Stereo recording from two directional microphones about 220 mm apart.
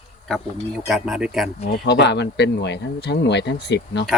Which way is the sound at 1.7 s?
50° left (ahead or behind).